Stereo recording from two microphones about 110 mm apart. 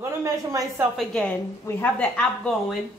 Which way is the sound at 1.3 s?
20° left (ahead or behind).